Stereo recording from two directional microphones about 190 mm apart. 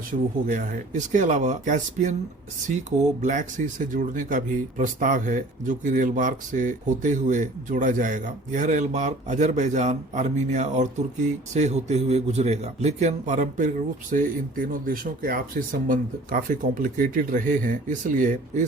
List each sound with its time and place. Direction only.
0.4 s speech: 45° right (ahead or behind)